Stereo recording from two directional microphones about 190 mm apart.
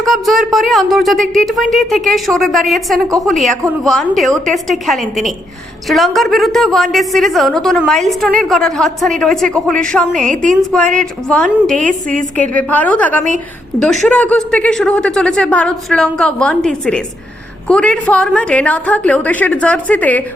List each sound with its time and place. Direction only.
0.0 s speech: centre (ahead or behind)
10.1 s a woman's voice: 40° right (ahead or behind)
10.9 s speech: 5° left (ahead or behind)
11.8 s a woman's voice: 45° right (ahead or behind)
12.4 s a woman's voice: 10° left (ahead or behind)